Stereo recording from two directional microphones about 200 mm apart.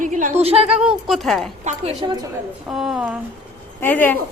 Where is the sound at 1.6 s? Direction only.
30° right (ahead or behind).